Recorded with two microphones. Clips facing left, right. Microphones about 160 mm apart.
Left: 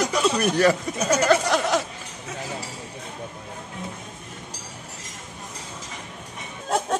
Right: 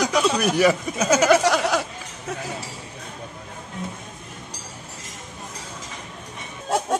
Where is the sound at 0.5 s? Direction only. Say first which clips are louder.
Right 1 dB; 10° right (ahead or behind).